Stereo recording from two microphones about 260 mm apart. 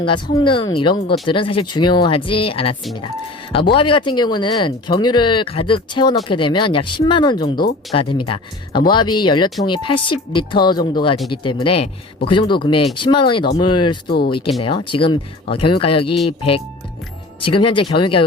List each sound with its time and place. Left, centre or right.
0.0 s speech: centre
3.8 s speech: centre